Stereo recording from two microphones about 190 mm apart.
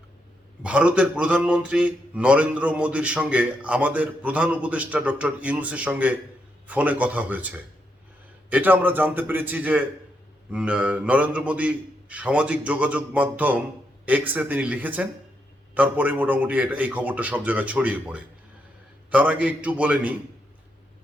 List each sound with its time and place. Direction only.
0.6 s speech: 5° right (ahead or behind)